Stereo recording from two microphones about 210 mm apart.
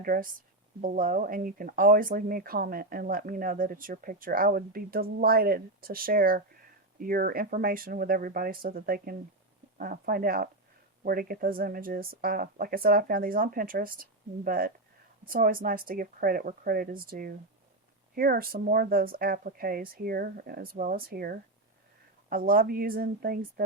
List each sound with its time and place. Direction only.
0.0 s speech: 40° right (ahead or behind)